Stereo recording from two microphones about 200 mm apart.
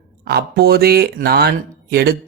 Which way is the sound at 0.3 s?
55° right (ahead or behind).